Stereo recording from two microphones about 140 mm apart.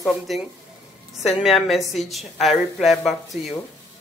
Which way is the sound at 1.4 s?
Centre (ahead or behind).